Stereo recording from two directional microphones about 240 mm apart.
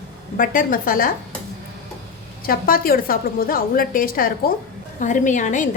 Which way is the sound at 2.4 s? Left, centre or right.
Left.